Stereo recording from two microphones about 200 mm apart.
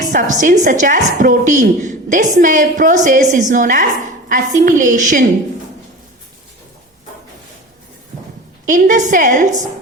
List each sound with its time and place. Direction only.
0.1 s a woman's voice: 40° right (ahead or behind)
8.6 s a woman's voice: 40° right (ahead or behind)